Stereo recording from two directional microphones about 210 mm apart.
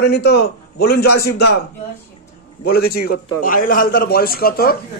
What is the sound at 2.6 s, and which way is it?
A man's voice, 50° left (ahead or behind).